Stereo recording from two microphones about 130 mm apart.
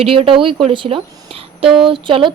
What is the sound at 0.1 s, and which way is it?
Speech, 45° right (ahead or behind).